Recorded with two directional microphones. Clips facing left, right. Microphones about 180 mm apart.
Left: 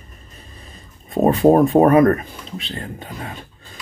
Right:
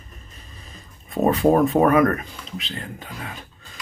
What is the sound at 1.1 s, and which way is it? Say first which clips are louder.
Speech: left 4 dB; 35° left (ahead or behind).